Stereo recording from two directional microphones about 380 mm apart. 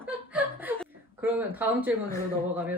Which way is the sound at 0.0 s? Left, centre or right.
Centre.